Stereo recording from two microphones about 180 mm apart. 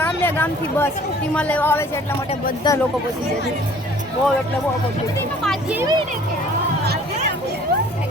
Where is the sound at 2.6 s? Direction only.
25° left (ahead or behind).